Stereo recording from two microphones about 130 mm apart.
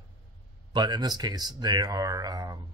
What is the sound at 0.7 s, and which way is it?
Speech, 35° right (ahead or behind).